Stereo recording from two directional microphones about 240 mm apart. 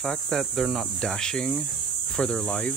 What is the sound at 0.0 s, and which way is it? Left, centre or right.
Speech, centre.